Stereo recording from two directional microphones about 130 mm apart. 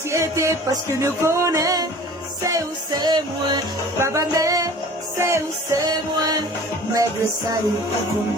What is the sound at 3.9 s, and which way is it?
Music, 20° right (ahead or behind).